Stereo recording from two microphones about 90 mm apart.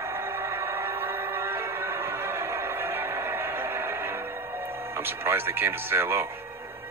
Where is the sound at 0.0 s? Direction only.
25° right (ahead or behind).